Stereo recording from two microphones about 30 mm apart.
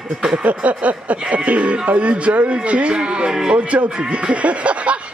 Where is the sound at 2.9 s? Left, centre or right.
Right.